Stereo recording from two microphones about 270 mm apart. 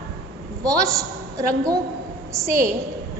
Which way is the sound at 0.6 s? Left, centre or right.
Centre.